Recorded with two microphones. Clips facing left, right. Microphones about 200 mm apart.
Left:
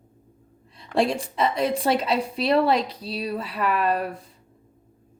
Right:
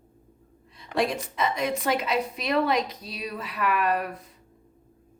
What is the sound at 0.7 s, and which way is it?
A woman's voice, 30° left (ahead or behind).